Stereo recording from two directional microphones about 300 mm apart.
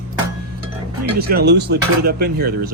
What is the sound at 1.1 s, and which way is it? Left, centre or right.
Speech, right.